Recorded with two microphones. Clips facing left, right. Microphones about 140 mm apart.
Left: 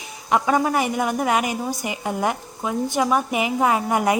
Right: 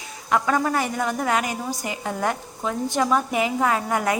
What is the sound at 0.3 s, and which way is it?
Speech, 15° left (ahead or behind).